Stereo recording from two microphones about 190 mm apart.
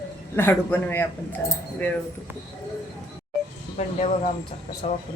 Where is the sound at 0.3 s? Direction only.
10° left (ahead or behind).